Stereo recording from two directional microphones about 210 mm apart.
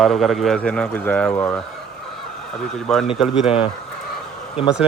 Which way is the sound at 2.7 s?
5° left (ahead or behind).